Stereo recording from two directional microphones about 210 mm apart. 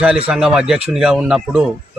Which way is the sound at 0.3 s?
Centre (ahead or behind).